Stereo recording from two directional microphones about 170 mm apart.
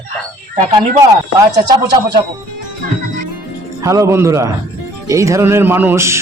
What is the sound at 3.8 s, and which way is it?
A man's voice, 15° right (ahead or behind).